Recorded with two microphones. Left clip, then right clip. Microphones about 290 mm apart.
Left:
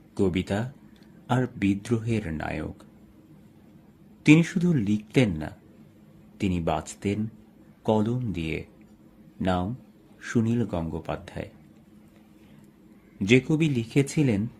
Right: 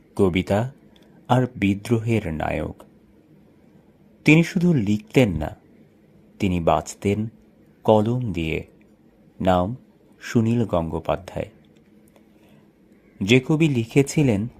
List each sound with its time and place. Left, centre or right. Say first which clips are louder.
0.1 s speech: right 6 dB; right
4.2 s speech: right 3 dB; centre
13.1 s speech: right 3 dB; centre